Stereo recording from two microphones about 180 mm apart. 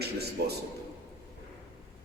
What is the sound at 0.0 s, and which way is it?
Speech, 60° right (ahead or behind).